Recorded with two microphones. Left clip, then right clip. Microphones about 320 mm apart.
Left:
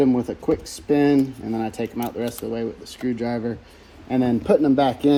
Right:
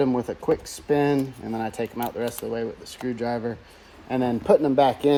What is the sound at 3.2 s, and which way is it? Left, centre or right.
Speech, right.